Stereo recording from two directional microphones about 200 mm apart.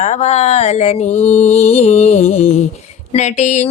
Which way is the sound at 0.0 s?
35° left (ahead or behind).